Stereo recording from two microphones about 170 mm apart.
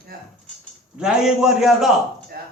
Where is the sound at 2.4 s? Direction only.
70° right (ahead or behind).